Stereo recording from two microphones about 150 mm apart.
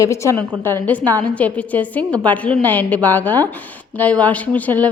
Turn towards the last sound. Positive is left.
turn(degrees=10)  # may be behind; listen again after turning